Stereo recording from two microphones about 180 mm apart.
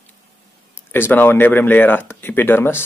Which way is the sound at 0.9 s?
10° left (ahead or behind).